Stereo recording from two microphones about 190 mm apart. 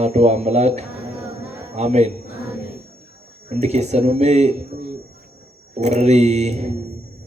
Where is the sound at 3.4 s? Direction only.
35° right (ahead or behind).